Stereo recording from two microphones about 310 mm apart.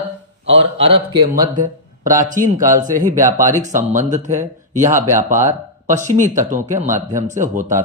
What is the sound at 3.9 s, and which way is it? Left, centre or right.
Speech, right.